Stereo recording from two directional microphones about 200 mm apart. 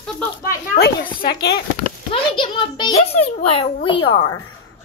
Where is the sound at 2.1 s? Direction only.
25° left (ahead or behind).